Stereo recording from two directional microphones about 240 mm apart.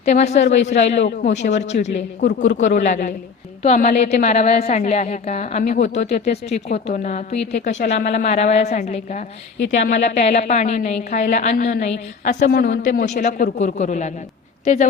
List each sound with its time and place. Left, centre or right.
0.0 s a woman's voice: left